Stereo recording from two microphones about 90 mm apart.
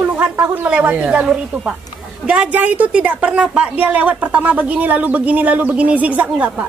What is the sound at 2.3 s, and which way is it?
A woman's voice, 15° right (ahead or behind).